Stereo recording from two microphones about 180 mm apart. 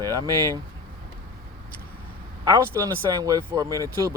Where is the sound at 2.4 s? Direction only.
15° right (ahead or behind).